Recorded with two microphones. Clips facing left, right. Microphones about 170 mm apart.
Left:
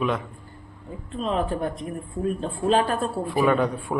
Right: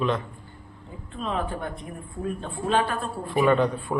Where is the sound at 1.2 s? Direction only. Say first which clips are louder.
Left 4 dB; 35° left (ahead or behind).